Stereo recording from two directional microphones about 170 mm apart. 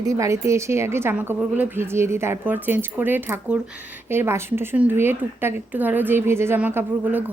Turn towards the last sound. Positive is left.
turn(degrees=-10)  # may be behind; listen again after turning